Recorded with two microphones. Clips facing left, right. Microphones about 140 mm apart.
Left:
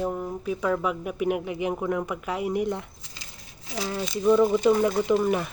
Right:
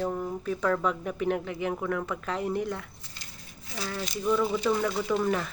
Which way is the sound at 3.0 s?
90° left.